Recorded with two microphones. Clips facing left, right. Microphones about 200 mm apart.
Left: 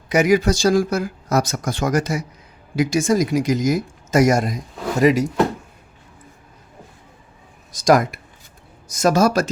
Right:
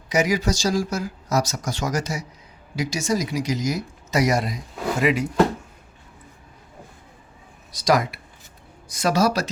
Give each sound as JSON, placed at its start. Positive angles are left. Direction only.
{"t": 0.1, "sound": "speech", "side_deg": 55}
{"t": 7.7, "sound": "speech", "side_deg": 45}